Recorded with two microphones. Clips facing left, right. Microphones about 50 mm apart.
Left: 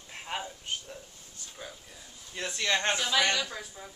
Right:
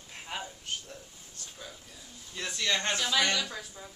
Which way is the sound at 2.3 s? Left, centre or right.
Left.